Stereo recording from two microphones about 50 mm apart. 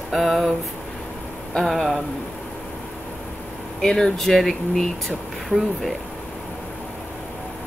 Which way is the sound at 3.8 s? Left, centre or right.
Centre.